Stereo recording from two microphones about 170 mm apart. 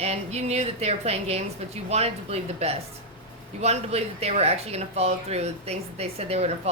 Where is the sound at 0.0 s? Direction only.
40° right (ahead or behind).